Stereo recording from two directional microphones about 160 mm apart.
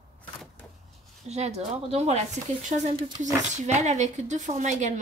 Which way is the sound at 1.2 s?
45° right (ahead or behind).